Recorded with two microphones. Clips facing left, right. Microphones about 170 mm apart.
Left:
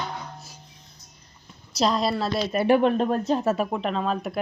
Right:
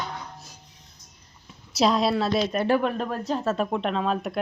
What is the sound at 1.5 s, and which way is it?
A woman's voice, centre (ahead or behind).